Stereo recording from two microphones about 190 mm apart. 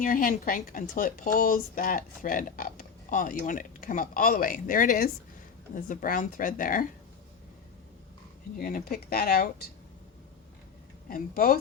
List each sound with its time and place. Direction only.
0.0 s a woman's voice: 45° left (ahead or behind)
8.5 s a woman's voice: 50° left (ahead or behind)
11.1 s a woman's voice: 50° left (ahead or behind)